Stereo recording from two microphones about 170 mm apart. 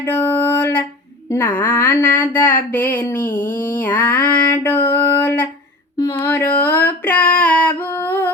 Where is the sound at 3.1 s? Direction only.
55° left (ahead or behind).